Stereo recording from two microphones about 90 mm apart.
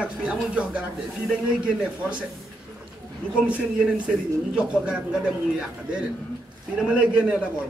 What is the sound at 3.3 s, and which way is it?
A man's voice, 10° right (ahead or behind).